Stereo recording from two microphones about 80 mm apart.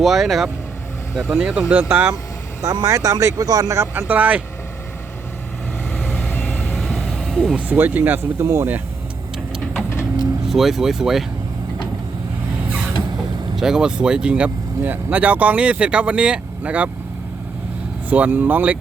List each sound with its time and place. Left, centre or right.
0.0 s speech: centre
1.2 s speech: centre
2.6 s speech: right
3.9 s speech: right
5.9 s vehicle: centre
6.7 s vehicle: centre
7.5 s speech: right
8.4 s speech: right
10.5 s speech: centre
13.6 s speech: centre
18.1 s speech: right